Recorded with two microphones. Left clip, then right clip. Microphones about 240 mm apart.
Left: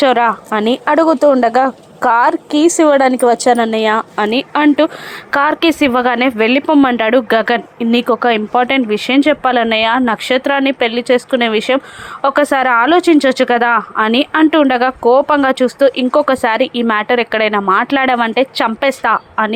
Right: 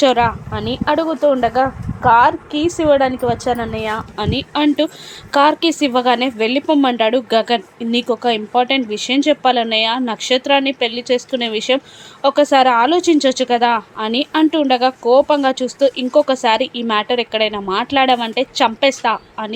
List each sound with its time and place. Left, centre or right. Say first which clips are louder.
0.0 s speech: left 3 dB; centre; by 4.0 s left
4.1 s speech: left 6 dB; centre